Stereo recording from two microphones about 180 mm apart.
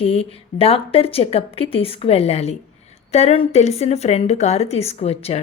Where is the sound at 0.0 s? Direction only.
30° left (ahead or behind).